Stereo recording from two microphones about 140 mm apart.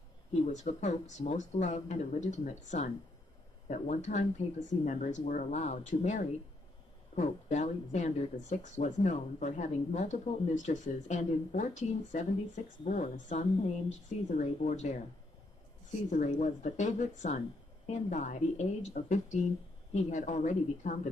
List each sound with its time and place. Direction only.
0.3 s speech: 55° left (ahead or behind)
16.1 s speech: 60° left (ahead or behind)